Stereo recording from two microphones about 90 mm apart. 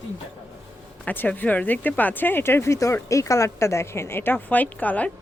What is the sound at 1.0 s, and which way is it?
Speech, 20° left (ahead or behind).